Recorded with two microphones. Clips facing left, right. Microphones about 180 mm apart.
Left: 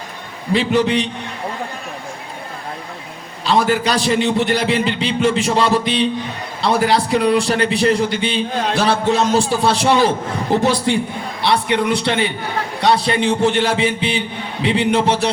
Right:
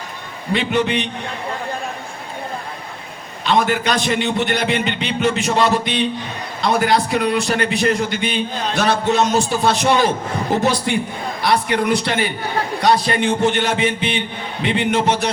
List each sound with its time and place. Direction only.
0.5 s a man's voice: 35° left (ahead or behind)
3.4 s a man's voice: 35° left (ahead or behind)